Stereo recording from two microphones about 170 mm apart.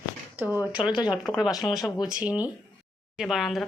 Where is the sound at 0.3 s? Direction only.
10° right (ahead or behind).